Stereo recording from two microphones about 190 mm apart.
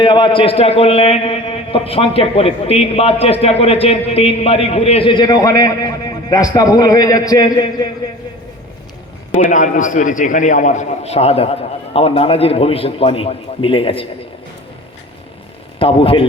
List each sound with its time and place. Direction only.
0.0 s a man's voice: 25° left (ahead or behind)
9.3 s a man's voice: 40° left (ahead or behind)
15.8 s a man's voice: 30° left (ahead or behind)